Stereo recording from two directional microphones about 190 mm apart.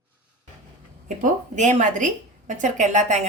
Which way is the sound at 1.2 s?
40° right (ahead or behind).